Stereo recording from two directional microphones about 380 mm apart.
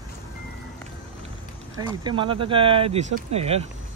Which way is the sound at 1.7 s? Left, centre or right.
Centre.